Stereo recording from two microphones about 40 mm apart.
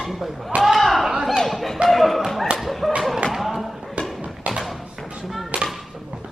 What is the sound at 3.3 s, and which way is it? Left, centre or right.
Basketball bounce, centre.